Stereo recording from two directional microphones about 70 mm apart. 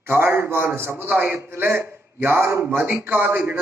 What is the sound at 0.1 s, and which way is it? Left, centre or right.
A man's voice, right.